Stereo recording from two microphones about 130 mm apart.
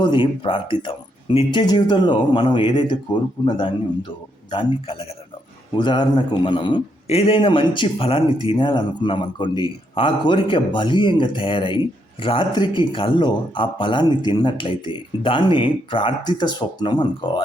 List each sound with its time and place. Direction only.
0.0 s a man's voice: 40° left (ahead or behind)
5.7 s speech: 35° left (ahead or behind)
7.1 s speech: 45° left (ahead or behind)